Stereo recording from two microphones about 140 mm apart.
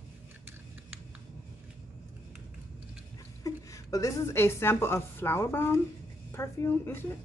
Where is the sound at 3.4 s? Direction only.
25° left (ahead or behind).